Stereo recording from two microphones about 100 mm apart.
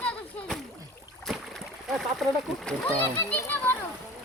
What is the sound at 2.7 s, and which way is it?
A child's voice, 15° left (ahead or behind).